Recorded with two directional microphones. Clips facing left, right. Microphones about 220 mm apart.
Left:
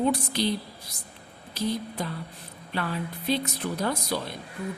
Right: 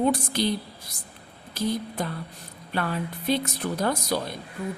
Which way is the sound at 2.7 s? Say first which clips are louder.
Right 2 dB; 50° right (ahead or behind).